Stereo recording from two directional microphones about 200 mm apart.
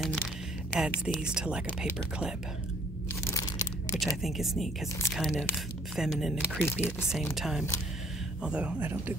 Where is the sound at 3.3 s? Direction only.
15° left (ahead or behind).